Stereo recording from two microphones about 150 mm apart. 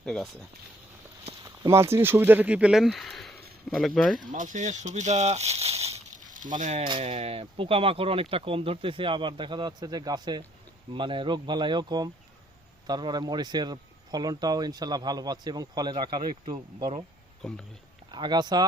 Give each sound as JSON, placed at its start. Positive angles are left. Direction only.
{"t": 0.0, "sound": "speech", "side_deg": 5}
{"t": 1.6, "sound": "speech", "side_deg": -20}
{"t": 4.3, "sound": "speech", "side_deg": -55}
{"t": 18.1, "sound": "speech", "side_deg": -30}